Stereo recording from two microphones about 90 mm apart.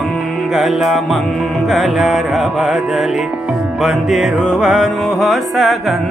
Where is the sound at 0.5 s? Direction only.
5° right (ahead or behind).